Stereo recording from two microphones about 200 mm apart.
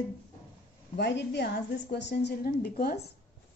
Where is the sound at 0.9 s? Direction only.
60° left (ahead or behind).